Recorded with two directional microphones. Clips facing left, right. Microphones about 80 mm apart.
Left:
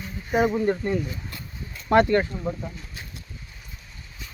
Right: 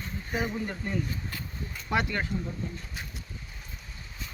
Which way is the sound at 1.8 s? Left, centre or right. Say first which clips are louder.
Left 11 dB; left.